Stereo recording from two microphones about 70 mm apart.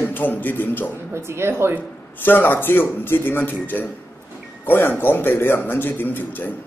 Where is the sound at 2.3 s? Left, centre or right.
Left.